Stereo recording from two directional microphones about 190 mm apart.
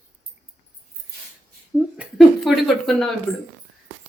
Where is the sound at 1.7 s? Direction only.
Centre (ahead or behind).